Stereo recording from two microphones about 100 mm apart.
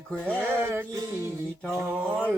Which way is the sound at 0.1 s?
15° left (ahead or behind).